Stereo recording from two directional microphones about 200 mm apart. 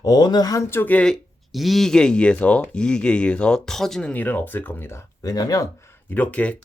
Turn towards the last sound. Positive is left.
turn(degrees=5)  # may be behind; listen again after turning